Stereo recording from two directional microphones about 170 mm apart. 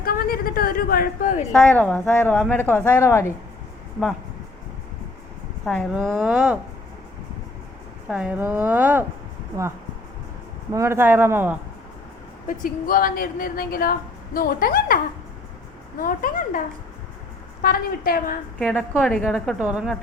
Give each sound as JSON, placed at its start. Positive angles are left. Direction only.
{"t": 0.0, "sound": "a woman's voice", "side_deg": 60}
{"t": 1.5, "sound": "speech", "side_deg": 5}
{"t": 5.6, "sound": "a woman's voice", "side_deg": 0}
{"t": 6.0, "sound": "a woman's voice", "side_deg": -10}
{"t": 8.0, "sound": "a woman's voice", "side_deg": -5}
{"t": 10.7, "sound": "a woman's voice", "side_deg": -15}
{"t": 12.5, "sound": "a woman's voice", "side_deg": 55}
{"t": 16.0, "sound": "a woman's voice", "side_deg": 55}
{"t": 18.7, "sound": "a woman's voice", "side_deg": 0}